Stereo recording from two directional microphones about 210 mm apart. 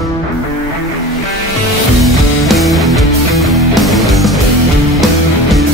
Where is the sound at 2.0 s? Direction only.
Centre (ahead or behind).